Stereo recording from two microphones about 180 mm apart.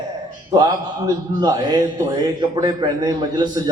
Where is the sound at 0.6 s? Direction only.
20° right (ahead or behind).